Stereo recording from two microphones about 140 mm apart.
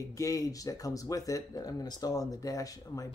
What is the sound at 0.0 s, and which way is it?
Speech, 25° left (ahead or behind).